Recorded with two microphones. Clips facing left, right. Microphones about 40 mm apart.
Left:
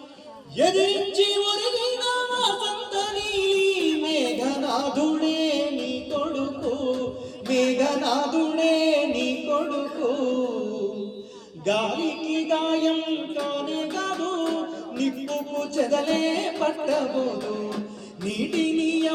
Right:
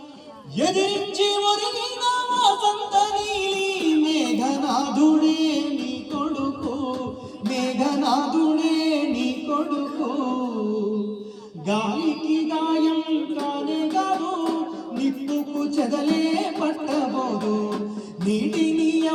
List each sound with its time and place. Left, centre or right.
0.5 s music: centre; by 10.6 s left
11.6 s music: left
13.1 s mantra: left
13.5 s music: left
17.1 s music: centre
18.3 s music: left